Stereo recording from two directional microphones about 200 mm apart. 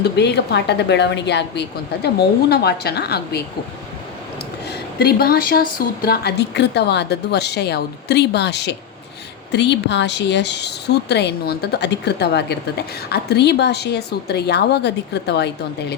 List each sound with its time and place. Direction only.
0.0 s a woman's voice: 55° left (ahead or behind)
4.7 s a woman's voice: 50° left (ahead or behind)